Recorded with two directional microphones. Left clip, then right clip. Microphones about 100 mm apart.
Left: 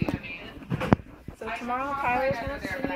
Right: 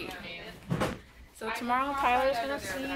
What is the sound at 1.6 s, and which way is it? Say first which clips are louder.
Speech: even; 10° left (ahead or behind).